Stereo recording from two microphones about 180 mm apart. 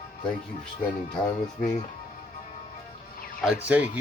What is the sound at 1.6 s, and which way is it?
Speech, 40° left (ahead or behind).